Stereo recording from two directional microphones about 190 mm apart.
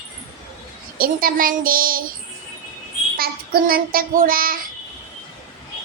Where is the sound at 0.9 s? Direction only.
50° right (ahead or behind).